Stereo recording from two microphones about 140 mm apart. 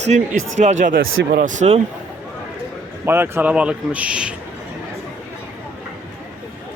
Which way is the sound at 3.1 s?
15° right (ahead or behind).